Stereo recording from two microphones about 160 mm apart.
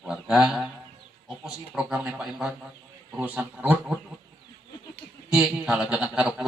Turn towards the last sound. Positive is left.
turn(degrees=-5)  # may be behind; listen again after turning